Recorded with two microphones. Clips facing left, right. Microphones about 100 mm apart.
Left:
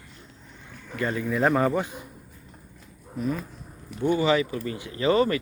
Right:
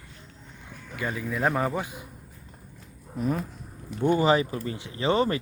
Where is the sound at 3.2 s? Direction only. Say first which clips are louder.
Right 1 dB; 45° right (ahead or behind).